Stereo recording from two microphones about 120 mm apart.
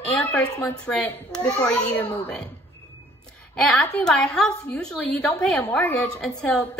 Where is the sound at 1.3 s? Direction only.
30° left (ahead or behind).